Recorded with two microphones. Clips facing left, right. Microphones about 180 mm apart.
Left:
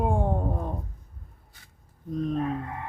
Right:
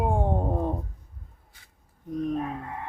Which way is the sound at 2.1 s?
15° right (ahead or behind).